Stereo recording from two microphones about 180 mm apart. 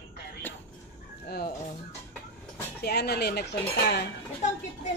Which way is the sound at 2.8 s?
65° left (ahead or behind).